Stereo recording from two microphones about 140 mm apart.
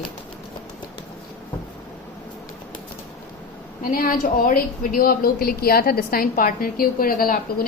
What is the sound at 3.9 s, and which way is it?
A woman's voice, 90° left.